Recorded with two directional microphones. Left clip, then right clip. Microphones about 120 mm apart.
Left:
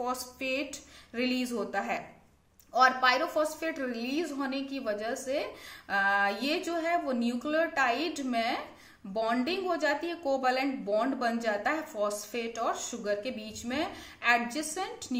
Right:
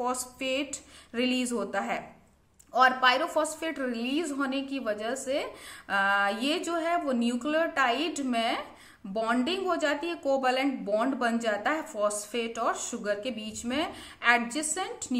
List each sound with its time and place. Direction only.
0.0 s a woman's voice: 40° right (ahead or behind)